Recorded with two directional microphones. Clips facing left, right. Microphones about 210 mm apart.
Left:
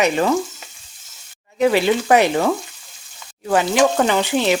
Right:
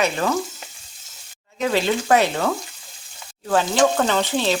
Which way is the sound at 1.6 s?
10° left (ahead or behind).